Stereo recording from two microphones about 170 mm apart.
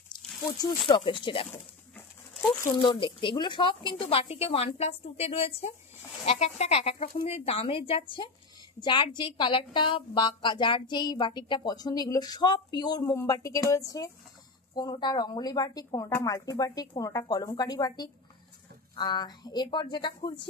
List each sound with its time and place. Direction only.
0.1 s a sound: 25° left (ahead or behind)
0.6 s a woman's voice: 25° left (ahead or behind)
2.8 s a woman's voice: 25° left (ahead or behind)